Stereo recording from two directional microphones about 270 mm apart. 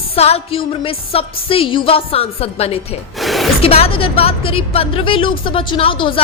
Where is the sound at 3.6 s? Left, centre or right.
Left.